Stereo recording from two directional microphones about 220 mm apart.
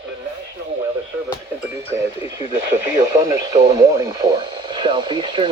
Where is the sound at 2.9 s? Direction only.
15° right (ahead or behind).